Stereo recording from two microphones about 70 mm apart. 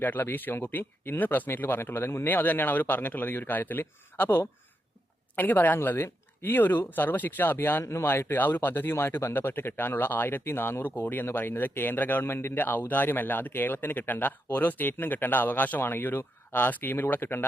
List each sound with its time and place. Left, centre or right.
0.0 s speech: left